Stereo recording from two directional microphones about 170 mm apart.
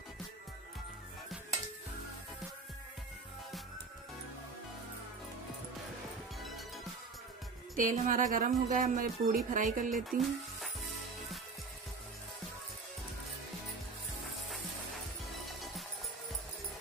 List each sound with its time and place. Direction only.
7.7 s speech: 50° right (ahead or behind)
10.0 s speech: centre (ahead or behind)
15.4 s music: centre (ahead or behind)